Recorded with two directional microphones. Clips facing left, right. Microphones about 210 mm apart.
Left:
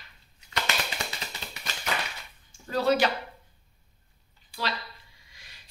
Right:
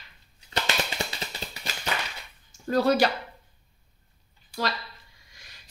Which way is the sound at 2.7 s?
45° right (ahead or behind).